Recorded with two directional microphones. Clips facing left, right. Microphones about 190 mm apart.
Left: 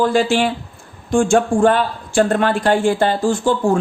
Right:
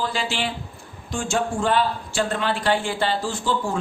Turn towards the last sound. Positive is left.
turn(degrees=50)  # may be behind; listen again after turning